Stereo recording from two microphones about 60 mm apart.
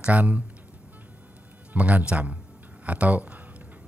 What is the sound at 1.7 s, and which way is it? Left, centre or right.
A man's voice, right.